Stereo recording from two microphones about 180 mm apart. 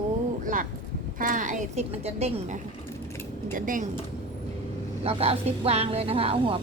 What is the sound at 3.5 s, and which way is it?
Speech, 50° right (ahead or behind).